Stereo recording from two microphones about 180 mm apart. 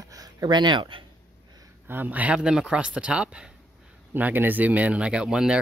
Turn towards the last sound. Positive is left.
turn(degrees=-5)  # may be behind; listen again after turning